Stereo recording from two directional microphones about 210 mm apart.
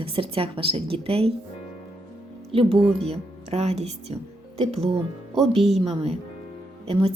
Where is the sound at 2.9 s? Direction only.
30° right (ahead or behind).